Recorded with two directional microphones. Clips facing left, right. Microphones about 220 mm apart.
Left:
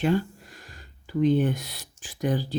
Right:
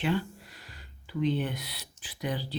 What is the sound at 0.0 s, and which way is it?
Speech, 45° left (ahead or behind).